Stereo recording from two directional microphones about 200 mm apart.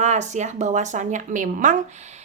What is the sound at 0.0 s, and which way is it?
A woman's voice, 35° right (ahead or behind).